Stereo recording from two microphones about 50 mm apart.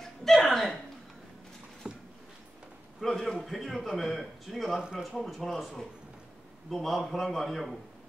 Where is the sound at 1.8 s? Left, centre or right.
Right.